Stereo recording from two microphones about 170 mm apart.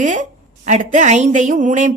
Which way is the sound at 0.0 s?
45° right (ahead or behind).